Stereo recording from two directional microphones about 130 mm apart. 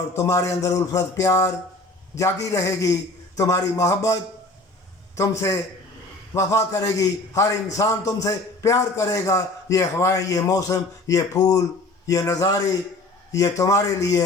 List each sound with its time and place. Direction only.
0.2 s a man's voice: 25° left (ahead or behind)